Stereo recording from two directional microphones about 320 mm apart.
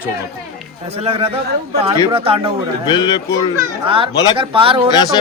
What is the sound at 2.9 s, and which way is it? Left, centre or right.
Speech, centre.